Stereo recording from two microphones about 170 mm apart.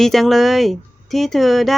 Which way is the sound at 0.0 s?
Centre (ahead or behind).